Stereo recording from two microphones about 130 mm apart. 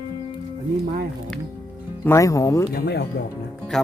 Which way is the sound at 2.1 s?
25° left (ahead or behind).